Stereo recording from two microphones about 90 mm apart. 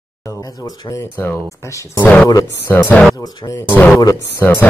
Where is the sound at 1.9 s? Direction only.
15° left (ahead or behind).